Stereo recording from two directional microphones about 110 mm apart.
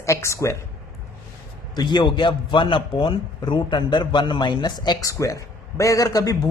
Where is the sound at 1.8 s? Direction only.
45° left (ahead or behind).